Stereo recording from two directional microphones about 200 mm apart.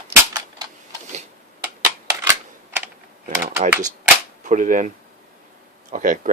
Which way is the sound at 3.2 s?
40° right (ahead or behind).